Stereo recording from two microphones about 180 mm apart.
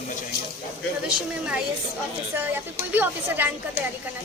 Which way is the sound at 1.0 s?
5° right (ahead or behind).